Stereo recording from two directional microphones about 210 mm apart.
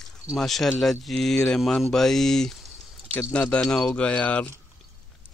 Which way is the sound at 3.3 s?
5° left (ahead or behind).